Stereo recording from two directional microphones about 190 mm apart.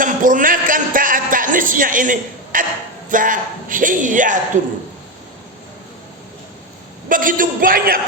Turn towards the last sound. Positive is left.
turn(degrees=-50)  # may be behind; listen again after turning